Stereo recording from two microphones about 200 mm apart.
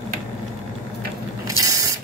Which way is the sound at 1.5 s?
15° right (ahead or behind).